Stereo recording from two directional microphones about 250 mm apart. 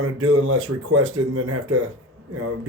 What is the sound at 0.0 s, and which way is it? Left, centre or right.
A man's voice, right.